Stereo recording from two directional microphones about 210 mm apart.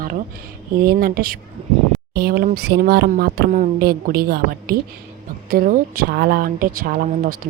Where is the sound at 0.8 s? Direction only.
45° right (ahead or behind).